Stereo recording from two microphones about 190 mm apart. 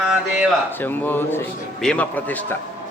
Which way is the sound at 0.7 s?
10° left (ahead or behind).